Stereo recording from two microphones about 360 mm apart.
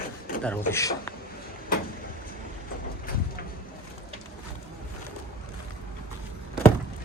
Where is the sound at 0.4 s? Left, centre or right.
Centre.